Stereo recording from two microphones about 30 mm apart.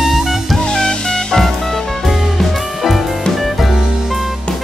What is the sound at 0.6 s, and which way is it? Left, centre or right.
Music, left.